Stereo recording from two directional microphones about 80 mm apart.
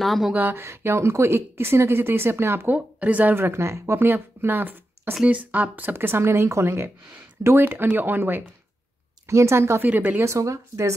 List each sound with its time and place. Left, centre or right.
0.0 s speech: centre
0.3 s a woman's voice: right
2.7 s a woman's voice: centre; by 9.8 s right
9.8 s speech: right
10.2 s a woman's voice: right